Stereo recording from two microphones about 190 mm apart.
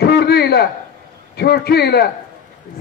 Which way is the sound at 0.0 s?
60° left (ahead or behind).